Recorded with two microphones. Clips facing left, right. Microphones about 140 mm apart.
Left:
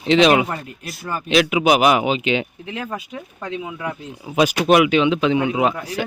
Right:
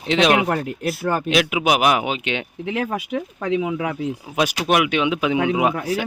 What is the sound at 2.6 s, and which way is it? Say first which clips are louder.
Speech: right 5 dB; 75° right (ahead or behind).